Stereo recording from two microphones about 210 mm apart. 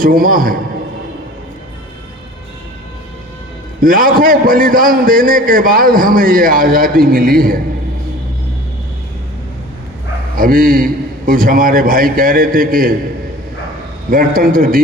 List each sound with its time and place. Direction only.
0.0 s a man's voice: 40° right (ahead or behind)
3.8 s a man's voice: 40° right (ahead or behind)
10.3 s a man's voice: 40° right (ahead or behind)
14.1 s a man's voice: 40° right (ahead or behind)